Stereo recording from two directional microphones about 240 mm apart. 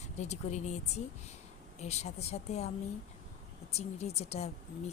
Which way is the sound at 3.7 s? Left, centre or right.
Left.